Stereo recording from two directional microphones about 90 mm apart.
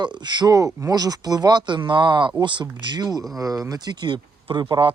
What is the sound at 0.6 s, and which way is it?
Speech, 40° right (ahead or behind).